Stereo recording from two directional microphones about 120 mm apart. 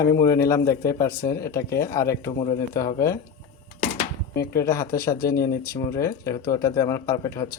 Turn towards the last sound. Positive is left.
turn(degrees=25)  # may be behind; listen again after turning